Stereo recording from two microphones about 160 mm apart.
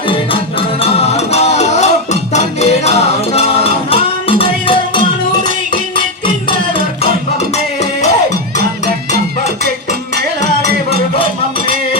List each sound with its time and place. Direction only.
0.8 s music: 40° left (ahead or behind)